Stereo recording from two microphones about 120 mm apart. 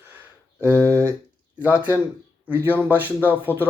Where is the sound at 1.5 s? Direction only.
10° right (ahead or behind).